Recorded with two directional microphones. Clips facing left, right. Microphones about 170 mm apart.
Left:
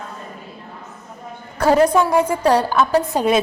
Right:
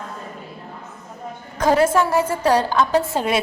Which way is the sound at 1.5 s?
10° left (ahead or behind).